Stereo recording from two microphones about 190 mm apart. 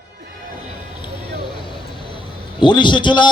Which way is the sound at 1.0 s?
25° left (ahead or behind).